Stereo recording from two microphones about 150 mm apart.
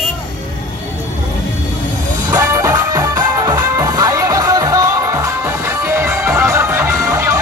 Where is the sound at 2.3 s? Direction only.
20° right (ahead or behind).